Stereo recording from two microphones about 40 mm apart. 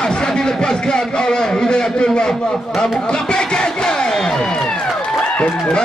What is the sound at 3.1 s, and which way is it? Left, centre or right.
Crowd, left.